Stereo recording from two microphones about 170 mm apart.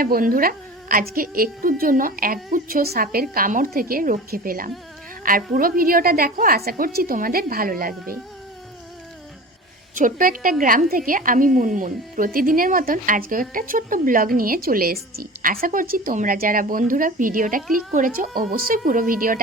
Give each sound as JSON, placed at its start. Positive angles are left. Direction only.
{"t": 0.0, "sound": "a woman's voice", "side_deg": -55}
{"t": 10.0, "sound": "a woman's voice", "side_deg": -55}